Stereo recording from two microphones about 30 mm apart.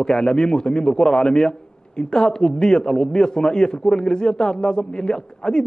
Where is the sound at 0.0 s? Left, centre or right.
Left.